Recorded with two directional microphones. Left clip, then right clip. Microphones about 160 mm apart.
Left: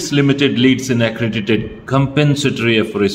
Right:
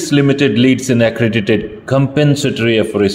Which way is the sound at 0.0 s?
25° right (ahead or behind).